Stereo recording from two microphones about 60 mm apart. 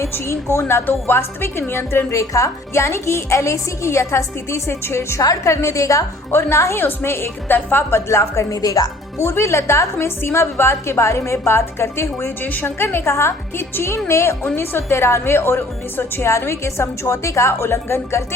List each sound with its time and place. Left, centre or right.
0.1 s a woman's voice: left
0.6 s a woman's voice: left
2.1 s a woman's voice: left
5.5 s a woman's voice: left
6.3 s a woman's voice: left
6.7 s a woman's voice: left
9.1 s a woman's voice: left
12.4 s a woman's voice: left